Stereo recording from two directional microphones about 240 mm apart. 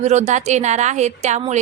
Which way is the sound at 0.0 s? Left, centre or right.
Right.